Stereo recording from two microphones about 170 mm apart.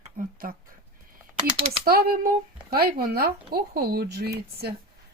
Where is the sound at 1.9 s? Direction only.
60° right (ahead or behind).